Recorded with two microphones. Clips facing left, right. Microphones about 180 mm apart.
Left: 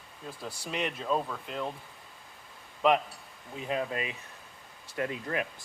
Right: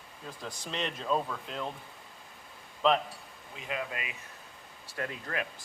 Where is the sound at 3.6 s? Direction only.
35° left (ahead or behind).